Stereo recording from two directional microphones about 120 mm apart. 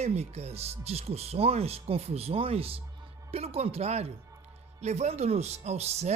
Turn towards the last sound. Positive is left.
turn(degrees=-65)  # may be behind; listen again after turning